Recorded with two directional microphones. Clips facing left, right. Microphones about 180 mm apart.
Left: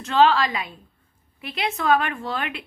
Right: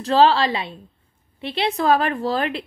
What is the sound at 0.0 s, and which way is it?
Speech, 35° right (ahead or behind).